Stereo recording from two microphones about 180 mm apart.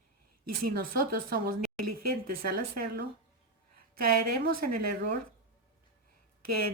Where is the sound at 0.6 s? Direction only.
55° right (ahead or behind).